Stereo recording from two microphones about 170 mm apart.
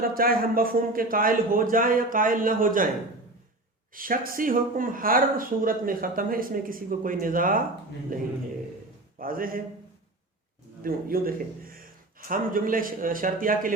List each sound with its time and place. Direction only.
0.0 s speech: 60° right (ahead or behind)
3.9 s speech: 55° right (ahead or behind)
9.1 s a man's voice: 55° right (ahead or behind)
10.8 s speech: 60° right (ahead or behind)